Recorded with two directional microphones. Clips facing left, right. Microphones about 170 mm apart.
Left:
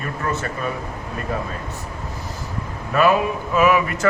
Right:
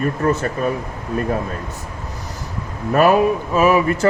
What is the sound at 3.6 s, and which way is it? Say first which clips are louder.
Speech: right 2 dB; 30° right (ahead or behind).